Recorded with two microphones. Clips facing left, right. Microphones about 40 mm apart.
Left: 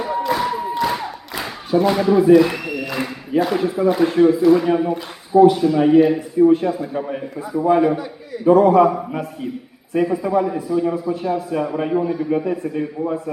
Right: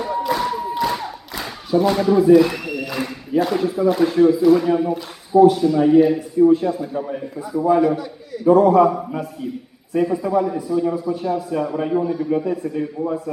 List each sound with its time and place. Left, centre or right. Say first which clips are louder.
0.3 s a sound: left 1 dB; centre
0.7 s crowd: left 1 dB; centre
3.4 s a man's voice: left 1 dB; centre